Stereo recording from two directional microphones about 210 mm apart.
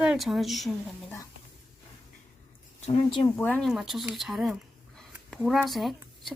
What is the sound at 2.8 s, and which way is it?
Speech, 25° left (ahead or behind).